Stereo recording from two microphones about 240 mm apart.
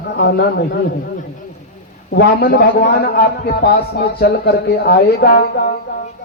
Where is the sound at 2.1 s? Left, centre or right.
Left.